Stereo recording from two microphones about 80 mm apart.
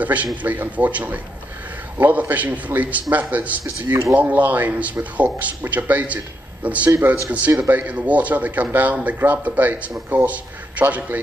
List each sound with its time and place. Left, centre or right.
0.0 s a man's voice: centre